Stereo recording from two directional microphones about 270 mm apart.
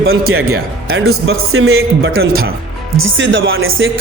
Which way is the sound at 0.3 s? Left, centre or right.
Right.